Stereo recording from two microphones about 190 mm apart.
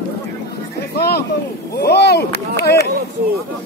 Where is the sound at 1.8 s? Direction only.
60° left (ahead or behind).